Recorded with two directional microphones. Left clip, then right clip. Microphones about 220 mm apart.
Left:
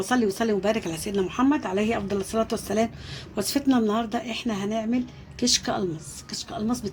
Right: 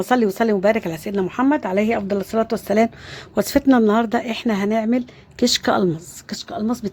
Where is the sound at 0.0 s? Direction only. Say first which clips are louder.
Right 6 dB; 50° right (ahead or behind).